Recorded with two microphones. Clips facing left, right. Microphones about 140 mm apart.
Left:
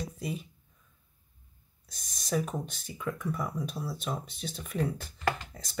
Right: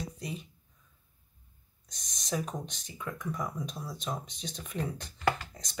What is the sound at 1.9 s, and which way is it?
Speech, 5° left (ahead or behind).